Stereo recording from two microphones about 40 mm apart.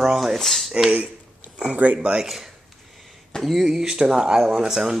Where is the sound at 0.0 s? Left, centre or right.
Centre.